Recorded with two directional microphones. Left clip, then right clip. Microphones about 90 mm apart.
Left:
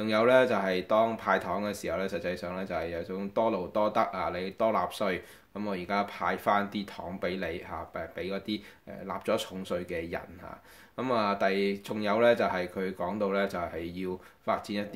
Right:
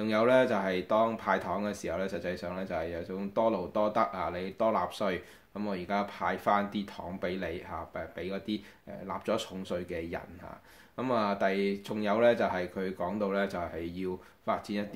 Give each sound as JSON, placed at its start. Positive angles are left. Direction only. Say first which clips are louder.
{"t": 0.0, "sound": "speech", "louder": "left 2 dB", "side_deg": 30}